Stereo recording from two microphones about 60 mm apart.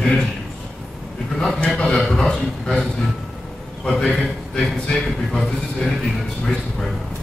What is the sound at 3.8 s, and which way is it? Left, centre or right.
A man's voice, centre.